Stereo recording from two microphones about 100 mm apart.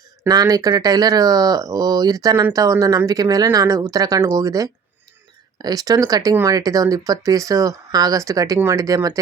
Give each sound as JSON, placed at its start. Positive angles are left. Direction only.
{"t": 0.3, "sound": "speech", "side_deg": -40}